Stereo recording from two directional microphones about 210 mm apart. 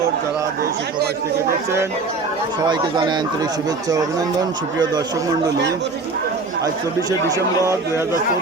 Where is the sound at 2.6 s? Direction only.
20° right (ahead or behind).